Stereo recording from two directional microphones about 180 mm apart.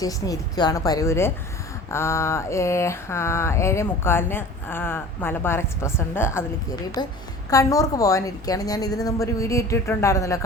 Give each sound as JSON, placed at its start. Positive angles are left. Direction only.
{"t": 0.0, "sound": "a woman's voice", "side_deg": 20}
{"t": 1.9, "sound": "a sound", "side_deg": 15}
{"t": 7.0, "sound": "a woman's voice", "side_deg": 20}